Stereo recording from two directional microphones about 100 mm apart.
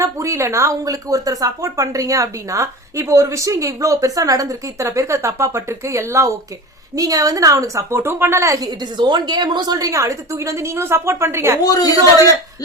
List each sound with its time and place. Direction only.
0.0 s speech: 30° right (ahead or behind)
11.6 s speech: 40° left (ahead or behind)